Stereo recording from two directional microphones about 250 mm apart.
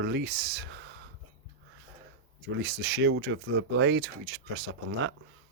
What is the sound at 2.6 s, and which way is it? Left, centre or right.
Speech, right.